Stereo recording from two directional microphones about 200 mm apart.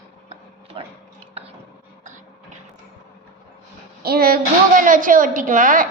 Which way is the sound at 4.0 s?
50° right (ahead or behind).